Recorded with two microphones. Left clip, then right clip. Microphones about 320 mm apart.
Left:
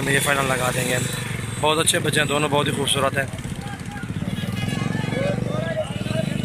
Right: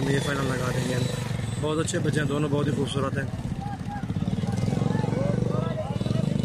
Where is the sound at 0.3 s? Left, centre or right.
Centre.